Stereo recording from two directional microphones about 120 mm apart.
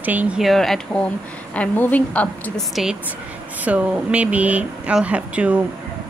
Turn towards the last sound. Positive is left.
turn(degrees=-10)  # may be behind; listen again after turning